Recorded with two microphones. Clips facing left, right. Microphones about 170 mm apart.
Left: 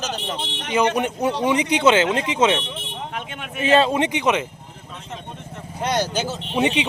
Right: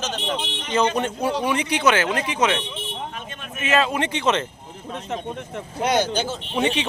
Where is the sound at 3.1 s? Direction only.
75° left (ahead or behind).